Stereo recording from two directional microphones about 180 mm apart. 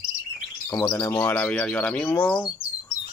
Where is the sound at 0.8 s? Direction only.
20° left (ahead or behind).